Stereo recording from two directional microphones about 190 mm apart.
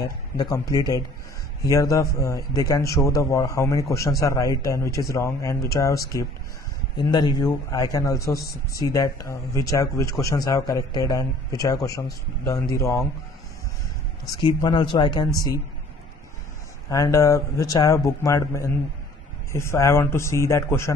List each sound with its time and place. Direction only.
0.4 s a man's voice: 20° left (ahead or behind)
14.4 s a man's voice: 25° left (ahead or behind)
16.9 s a man's voice: 15° left (ahead or behind)